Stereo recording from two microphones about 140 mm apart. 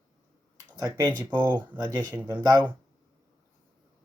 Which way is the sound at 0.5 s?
25° right (ahead or behind).